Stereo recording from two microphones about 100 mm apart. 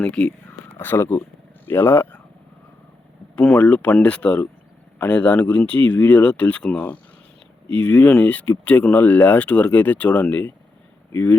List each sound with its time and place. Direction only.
0.0 s a sound: 10° left (ahead or behind)
0.8 s speech: 25° left (ahead or behind)
3.3 s speech: 10° left (ahead or behind)